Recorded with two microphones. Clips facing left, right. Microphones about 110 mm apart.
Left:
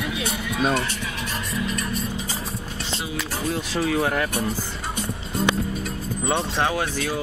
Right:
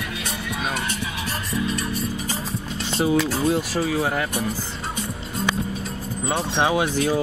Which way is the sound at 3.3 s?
10° right (ahead or behind).